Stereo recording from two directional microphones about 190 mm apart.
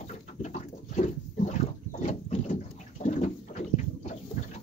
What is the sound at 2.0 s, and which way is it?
Boat, 40° left (ahead or behind).